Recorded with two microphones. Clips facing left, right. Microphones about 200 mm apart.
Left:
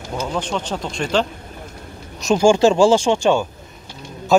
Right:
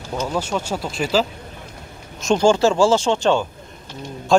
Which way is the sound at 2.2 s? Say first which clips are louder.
Left 2 dB; 10° left (ahead or behind).